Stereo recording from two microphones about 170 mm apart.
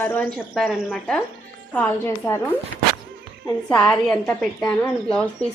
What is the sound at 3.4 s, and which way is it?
A woman's voice, 5° left (ahead or behind).